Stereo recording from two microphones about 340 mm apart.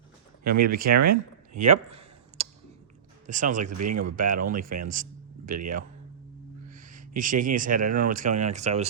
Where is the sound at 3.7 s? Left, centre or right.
Right.